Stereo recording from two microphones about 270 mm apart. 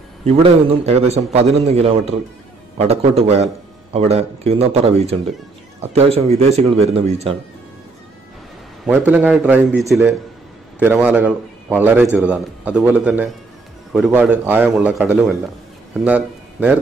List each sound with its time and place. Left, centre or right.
0.2 s speech: right
8.8 s a man's voice: centre